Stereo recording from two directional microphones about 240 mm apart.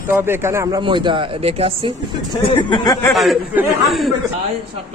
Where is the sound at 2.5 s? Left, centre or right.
Centre.